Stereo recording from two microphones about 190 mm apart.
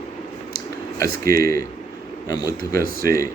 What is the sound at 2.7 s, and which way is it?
Speech, 50° right (ahead or behind).